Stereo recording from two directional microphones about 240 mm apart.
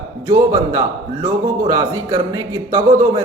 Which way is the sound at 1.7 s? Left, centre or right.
Centre.